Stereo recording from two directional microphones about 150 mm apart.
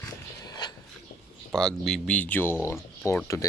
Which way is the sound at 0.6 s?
30° left (ahead or behind).